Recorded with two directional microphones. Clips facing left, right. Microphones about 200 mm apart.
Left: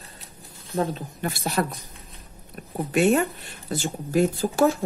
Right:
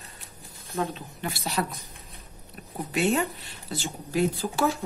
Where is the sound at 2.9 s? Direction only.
50° left (ahead or behind).